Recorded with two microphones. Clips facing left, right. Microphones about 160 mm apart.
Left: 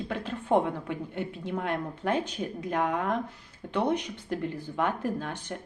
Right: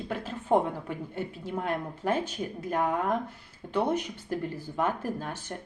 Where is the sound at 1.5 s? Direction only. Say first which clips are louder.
Even; 5° right (ahead or behind).